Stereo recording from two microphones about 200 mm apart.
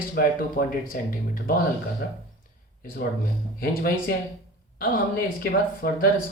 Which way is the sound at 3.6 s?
50° left (ahead or behind).